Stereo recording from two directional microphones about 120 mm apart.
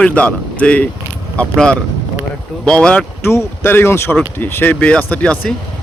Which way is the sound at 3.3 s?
20° left (ahead or behind).